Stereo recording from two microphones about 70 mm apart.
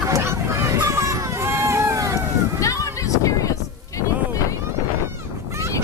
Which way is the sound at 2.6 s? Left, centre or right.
Left.